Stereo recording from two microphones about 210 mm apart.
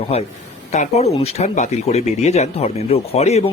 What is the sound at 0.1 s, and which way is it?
Speech, 30° left (ahead or behind).